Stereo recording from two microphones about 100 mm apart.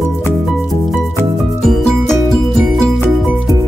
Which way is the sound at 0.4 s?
Centre (ahead or behind).